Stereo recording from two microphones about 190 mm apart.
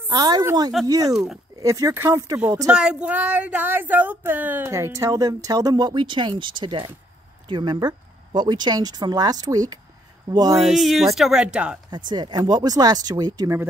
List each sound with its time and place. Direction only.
0.1 s speech: 20° right (ahead or behind)
10.5 s speech: centre (ahead or behind)
12.1 s speech: 20° right (ahead or behind)